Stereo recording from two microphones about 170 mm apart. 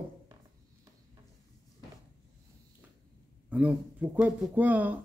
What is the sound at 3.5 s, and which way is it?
Speech, 10° right (ahead or behind).